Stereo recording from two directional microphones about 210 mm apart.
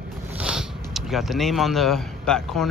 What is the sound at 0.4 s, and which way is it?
Speech, 5° right (ahead or behind).